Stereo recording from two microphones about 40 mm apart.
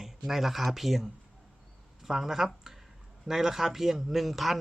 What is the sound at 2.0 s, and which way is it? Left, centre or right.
Speech, centre.